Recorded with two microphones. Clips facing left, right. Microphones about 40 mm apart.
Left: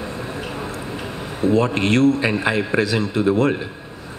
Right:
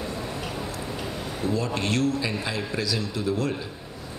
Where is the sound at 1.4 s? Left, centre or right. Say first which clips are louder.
Left 10 dB; left.